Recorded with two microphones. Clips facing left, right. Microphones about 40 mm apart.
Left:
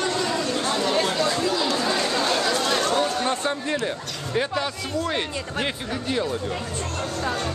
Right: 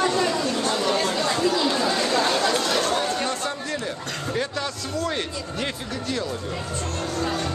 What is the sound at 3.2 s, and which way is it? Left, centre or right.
Speech, left.